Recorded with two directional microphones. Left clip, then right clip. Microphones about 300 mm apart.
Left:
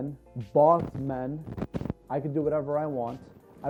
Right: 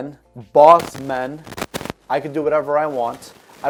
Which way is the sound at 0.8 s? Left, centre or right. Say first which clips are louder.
Right 10 dB; centre.